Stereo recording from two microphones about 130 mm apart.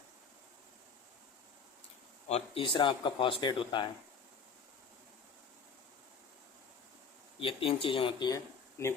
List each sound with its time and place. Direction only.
2.3 s speech: 40° left (ahead or behind)
7.3 s speech: 45° left (ahead or behind)
8.8 s speech: 20° left (ahead or behind)